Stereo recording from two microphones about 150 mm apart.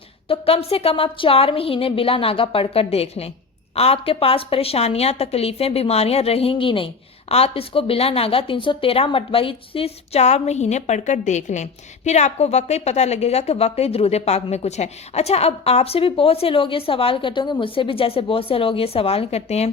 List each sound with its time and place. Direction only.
0.3 s a woman's voice: 40° left (ahead or behind)